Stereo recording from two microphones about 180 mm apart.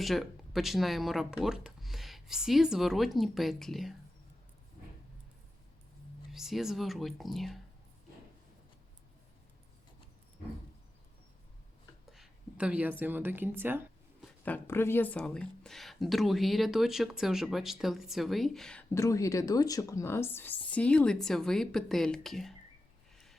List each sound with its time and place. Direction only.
0.0 s speech: centre (ahead or behind)
6.3 s speech: centre (ahead or behind)
12.1 s a woman's voice: 5° right (ahead or behind)
14.4 s speech: 10° left (ahead or behind)